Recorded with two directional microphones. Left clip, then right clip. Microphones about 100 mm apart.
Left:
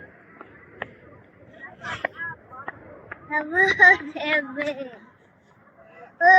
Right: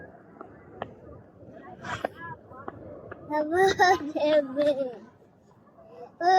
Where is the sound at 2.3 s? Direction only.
15° right (ahead or behind).